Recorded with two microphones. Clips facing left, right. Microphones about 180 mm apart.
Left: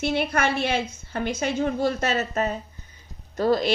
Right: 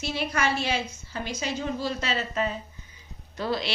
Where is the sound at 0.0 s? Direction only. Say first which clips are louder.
Left 4 dB; 55° left (ahead or behind).